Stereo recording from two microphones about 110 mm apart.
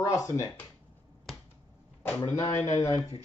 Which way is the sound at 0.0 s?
30° left (ahead or behind).